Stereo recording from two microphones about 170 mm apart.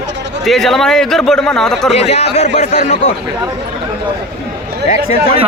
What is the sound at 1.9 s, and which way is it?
A man's voice, 40° left (ahead or behind).